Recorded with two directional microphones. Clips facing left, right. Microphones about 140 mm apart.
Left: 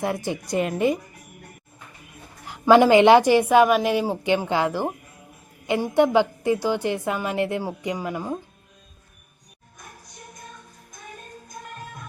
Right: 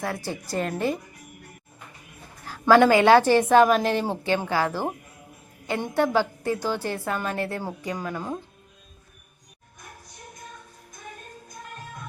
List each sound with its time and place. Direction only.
0.0 s a woman's voice: 20° left (ahead or behind)
2.5 s a woman's voice: 20° left (ahead or behind)